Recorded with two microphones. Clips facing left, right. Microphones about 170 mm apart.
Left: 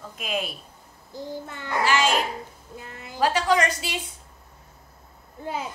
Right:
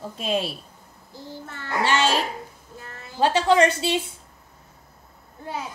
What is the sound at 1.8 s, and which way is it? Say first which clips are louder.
Speech: right 1 dB; 30° right (ahead or behind).